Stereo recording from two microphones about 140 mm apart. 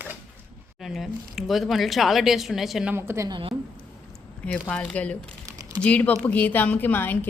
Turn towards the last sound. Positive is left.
turn(degrees=15)  # may be behind; listen again after turning